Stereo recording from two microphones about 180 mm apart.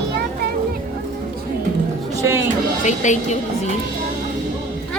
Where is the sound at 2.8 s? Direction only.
45° left (ahead or behind).